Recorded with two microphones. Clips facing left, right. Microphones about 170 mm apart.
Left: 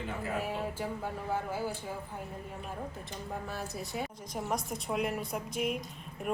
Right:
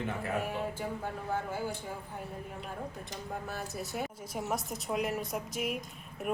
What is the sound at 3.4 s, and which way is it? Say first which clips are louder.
A woman's voice: even; centre (ahead or behind).